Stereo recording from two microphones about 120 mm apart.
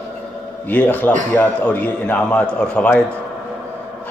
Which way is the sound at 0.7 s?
15° left (ahead or behind).